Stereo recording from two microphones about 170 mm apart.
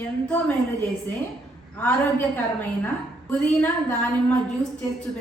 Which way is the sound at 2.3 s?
10° left (ahead or behind).